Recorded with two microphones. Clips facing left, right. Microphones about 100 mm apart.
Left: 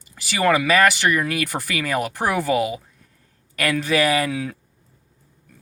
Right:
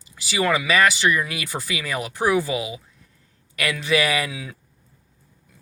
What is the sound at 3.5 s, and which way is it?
Speech, 45° left (ahead or behind).